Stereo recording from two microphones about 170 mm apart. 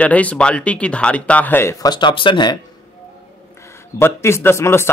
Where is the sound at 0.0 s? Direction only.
10° left (ahead or behind); by 2.6 s 25° left (ahead or behind).